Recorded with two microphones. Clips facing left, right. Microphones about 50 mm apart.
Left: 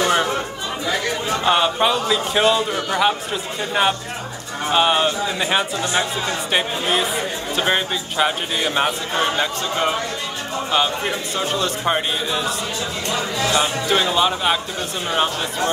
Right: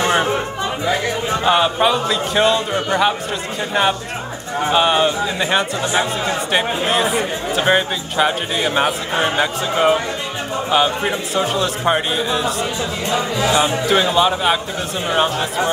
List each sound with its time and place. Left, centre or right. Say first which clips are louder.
1.4 s a man's voice: right 2 dB; centre
13.1 s speech: right 3 dB; centre
13.8 s a man's voice: right 3 dB; centre